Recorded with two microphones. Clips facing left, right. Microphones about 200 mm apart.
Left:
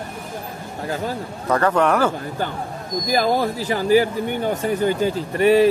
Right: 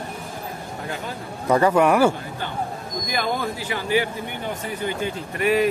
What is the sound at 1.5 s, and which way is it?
Speech, 10° right (ahead or behind).